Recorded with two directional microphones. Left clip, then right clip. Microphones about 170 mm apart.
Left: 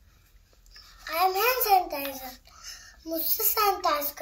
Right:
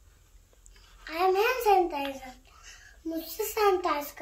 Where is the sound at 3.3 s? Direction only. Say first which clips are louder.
Even; 15° right (ahead or behind).